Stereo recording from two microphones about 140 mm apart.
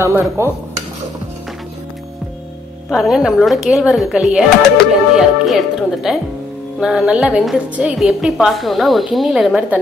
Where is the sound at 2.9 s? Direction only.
Centre (ahead or behind).